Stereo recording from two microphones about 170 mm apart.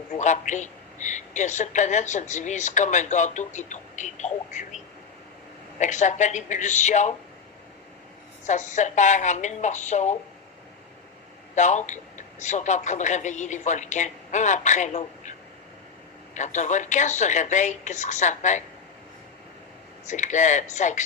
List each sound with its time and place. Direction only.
0.2 s a woman's voice: 45° left (ahead or behind)
5.8 s a woman's voice: 45° left (ahead or behind)
8.4 s a woman's voice: 45° left (ahead or behind)
11.5 s a woman's voice: 45° left (ahead or behind)
20.1 s a woman's voice: 45° left (ahead or behind)